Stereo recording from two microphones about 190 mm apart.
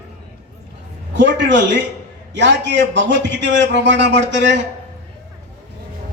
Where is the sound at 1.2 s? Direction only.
70° right (ahead or behind).